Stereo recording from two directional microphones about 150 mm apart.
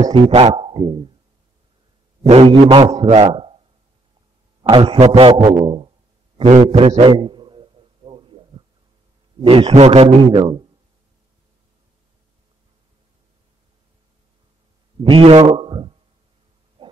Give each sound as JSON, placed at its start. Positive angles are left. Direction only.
{"t": 0.0, "sound": "a man's voice", "side_deg": -45}
{"t": 2.2, "sound": "a man's voice", "side_deg": -40}
{"t": 4.6, "sound": "a man's voice", "side_deg": -35}
{"t": 4.9, "sound": "a man's voice", "side_deg": -45}
{"t": 6.3, "sound": "a man's voice", "side_deg": -50}
{"t": 7.0, "sound": "a sound", "side_deg": -35}
{"t": 9.4, "sound": "a man's voice", "side_deg": -40}
{"t": 15.0, "sound": "a man's voice", "side_deg": -40}
{"t": 16.8, "sound": "heart murmur", "side_deg": -35}